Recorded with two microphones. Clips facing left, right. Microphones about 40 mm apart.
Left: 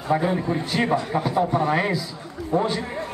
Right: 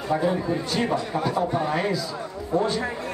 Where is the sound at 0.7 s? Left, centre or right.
Centre.